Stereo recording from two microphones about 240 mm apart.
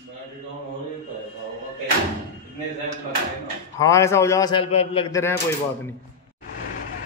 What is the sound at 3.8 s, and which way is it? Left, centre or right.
A man's voice, centre.